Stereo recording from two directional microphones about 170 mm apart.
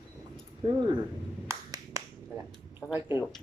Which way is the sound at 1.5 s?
20° right (ahead or behind).